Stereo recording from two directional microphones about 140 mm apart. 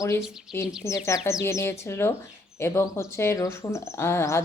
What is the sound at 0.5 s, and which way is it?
Speech, 15° left (ahead or behind).